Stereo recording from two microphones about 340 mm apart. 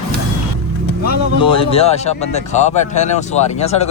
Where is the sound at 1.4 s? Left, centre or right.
Centre.